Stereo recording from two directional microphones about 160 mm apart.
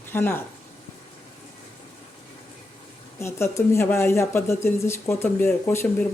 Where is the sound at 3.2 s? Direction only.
15° left (ahead or behind).